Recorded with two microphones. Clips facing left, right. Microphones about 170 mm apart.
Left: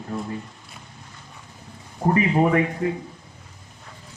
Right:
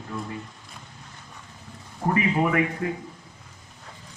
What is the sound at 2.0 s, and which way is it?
Speech, 35° left (ahead or behind).